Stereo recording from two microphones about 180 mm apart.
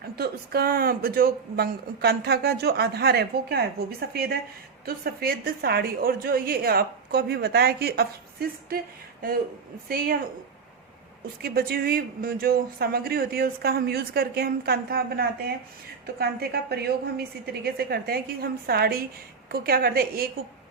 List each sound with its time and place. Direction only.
0.2 s speech: 55° right (ahead or behind)
11.4 s speech: 60° right (ahead or behind)